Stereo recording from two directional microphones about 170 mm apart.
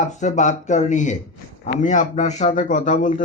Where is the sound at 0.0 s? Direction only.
45° left (ahead or behind).